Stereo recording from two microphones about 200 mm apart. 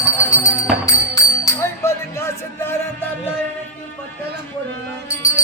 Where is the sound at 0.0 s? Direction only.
15° left (ahead or behind).